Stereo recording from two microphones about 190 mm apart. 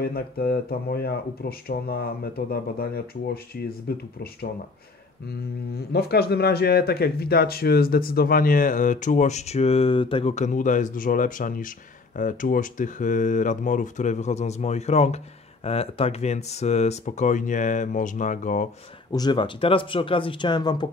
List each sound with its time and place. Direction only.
0.0 s speech: 55° left (ahead or behind)
5.8 s speech: 55° left (ahead or behind)
19.1 s speech: 25° left (ahead or behind)